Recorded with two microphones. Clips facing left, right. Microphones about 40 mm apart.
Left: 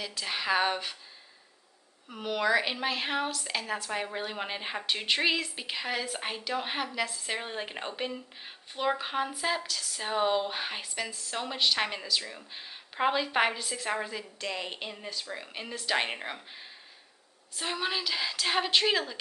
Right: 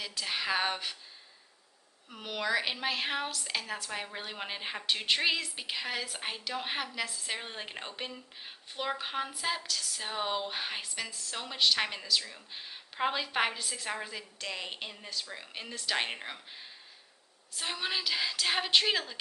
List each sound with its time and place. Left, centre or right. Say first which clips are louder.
0.0 s a woman's voice: left 1 dB; centre
2.0 s a woman's voice: left 5 dB; centre
12.2 s speech: left 2 dB; centre
12.5 s a woman's voice: left 3 dB; centre